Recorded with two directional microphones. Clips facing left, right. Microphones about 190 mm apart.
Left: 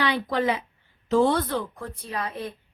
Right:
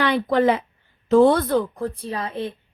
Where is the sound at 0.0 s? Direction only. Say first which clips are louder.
Right 6 dB; 55° right (ahead or behind).